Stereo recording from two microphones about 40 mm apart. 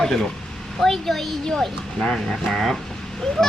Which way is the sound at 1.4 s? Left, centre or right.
Centre.